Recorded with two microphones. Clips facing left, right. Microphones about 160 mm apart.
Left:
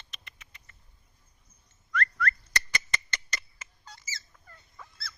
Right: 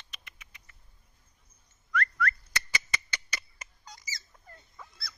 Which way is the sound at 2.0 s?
10° right (ahead or behind).